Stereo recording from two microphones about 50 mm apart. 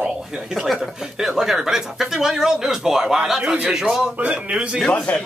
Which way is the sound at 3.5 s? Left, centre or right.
Right.